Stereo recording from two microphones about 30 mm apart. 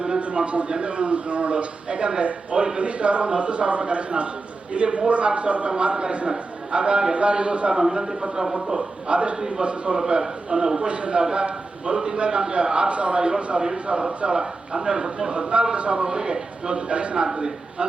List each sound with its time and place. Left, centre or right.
0.2 s a sound: right
0.7 s a man's voice: right
7.7 s speech: right
9.0 s a man's voice: right
10.1 s speech: right
10.8 s a man's voice: right
15.4 s a man's voice: right
16.0 s a man's voice: right